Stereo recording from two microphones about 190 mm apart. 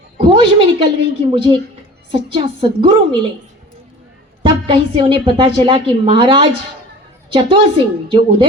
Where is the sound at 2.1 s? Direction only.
25° right (ahead or behind).